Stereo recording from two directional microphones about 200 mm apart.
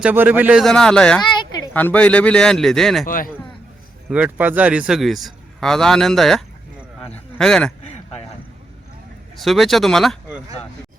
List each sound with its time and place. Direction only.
0.0 s a man's voice: 10° right (ahead or behind)
3.1 s a man's voice: 45° left (ahead or behind)
4.1 s a man's voice: 5° right (ahead or behind)
7.9 s a sound: 35° left (ahead or behind)
9.3 s speech: centre (ahead or behind)